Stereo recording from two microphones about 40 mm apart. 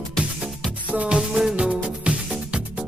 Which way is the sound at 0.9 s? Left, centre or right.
Right.